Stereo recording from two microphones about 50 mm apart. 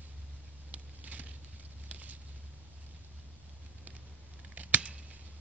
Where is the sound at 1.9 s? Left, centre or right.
Right.